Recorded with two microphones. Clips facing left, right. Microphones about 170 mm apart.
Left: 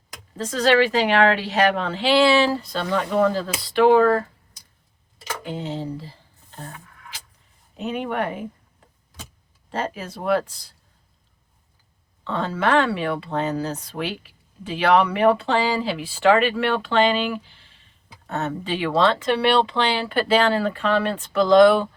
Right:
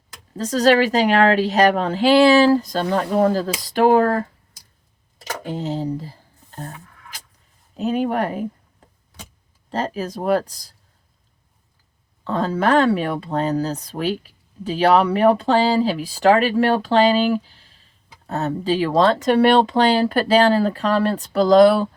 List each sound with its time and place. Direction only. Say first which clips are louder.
0.3 s speech: right 3 dB; 40° right (ahead or behind)
5.2 s speech: right 3 dB; 40° right (ahead or behind)
7.8 s speech: right 5 dB; 35° right (ahead or behind)
9.7 s speech: right 4 dB; 35° right (ahead or behind)
12.2 s speech: right 3 dB; 40° right (ahead or behind)